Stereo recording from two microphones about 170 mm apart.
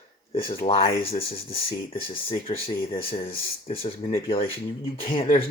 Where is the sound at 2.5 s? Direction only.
35° left (ahead or behind).